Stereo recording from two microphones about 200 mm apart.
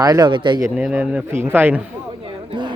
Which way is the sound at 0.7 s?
5° right (ahead or behind).